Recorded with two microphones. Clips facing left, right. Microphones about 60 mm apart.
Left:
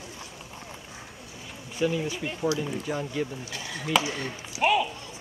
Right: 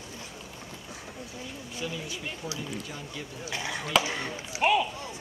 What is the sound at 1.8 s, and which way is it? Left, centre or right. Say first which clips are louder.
Speech: left 9 dB; left.